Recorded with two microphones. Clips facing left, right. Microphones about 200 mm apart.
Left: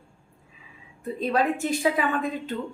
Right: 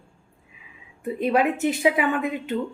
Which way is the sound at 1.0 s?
15° right (ahead or behind).